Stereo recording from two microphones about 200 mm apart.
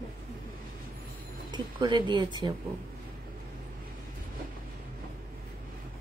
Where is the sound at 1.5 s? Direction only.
20° right (ahead or behind).